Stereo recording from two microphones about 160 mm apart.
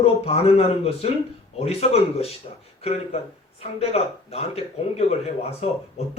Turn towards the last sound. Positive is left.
turn(degrees=40)  # may be behind; listen again after turning